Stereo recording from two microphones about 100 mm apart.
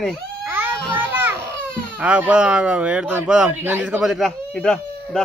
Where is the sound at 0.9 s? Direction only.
20° right (ahead or behind).